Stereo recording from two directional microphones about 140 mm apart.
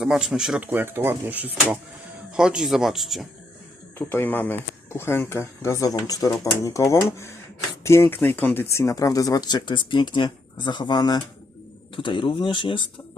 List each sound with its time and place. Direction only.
0.0 s speech: 5° right (ahead or behind)
3.9 s speech: 15° left (ahead or behind); by 12.8 s 35° left (ahead or behind)